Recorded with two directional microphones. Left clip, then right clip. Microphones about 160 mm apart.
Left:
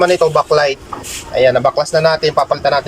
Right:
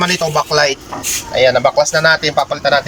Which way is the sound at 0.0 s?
Centre (ahead or behind).